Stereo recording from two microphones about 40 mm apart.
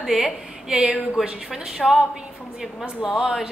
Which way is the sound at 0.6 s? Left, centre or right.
Right.